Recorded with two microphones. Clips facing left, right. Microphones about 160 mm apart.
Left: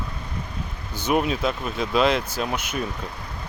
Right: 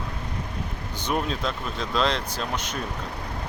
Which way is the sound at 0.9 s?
10° left (ahead or behind).